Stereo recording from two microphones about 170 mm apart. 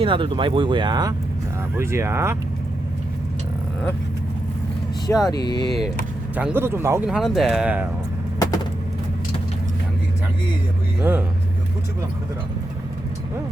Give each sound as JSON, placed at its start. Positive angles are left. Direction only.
{"t": 0.0, "sound": "speech", "side_deg": -30}
{"t": 1.7, "sound": "speech", "side_deg": -15}
{"t": 5.0, "sound": "speech", "side_deg": 20}
{"t": 6.3, "sound": "speech", "side_deg": -10}
{"t": 7.2, "sound": "speech", "side_deg": 0}
{"t": 11.0, "sound": "speech", "side_deg": -10}